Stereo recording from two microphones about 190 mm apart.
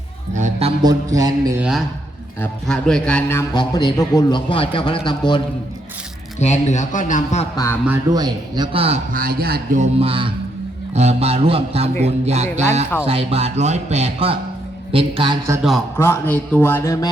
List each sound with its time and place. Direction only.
0.3 s a man's voice: 40° right (ahead or behind)
0.9 s a man's voice: 20° right (ahead or behind)
2.4 s a man's voice: 5° left (ahead or behind)
3.5 s a man's voice: 25° left (ahead or behind)
6.4 s a man's voice: 35° left (ahead or behind)
7.5 s a man's voice: 15° left (ahead or behind)
8.1 s a man's voice: 20° right (ahead or behind)
9.1 s a man's voice: 50° right (ahead or behind)
9.8 s a man's voice: 30° right (ahead or behind)
16.0 s a man's voice: 10° left (ahead or behind)